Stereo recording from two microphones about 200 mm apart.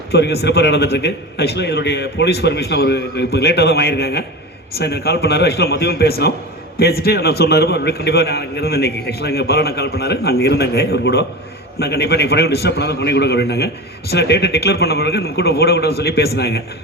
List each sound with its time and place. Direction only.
0.1 s a man's voice: 55° left (ahead or behind)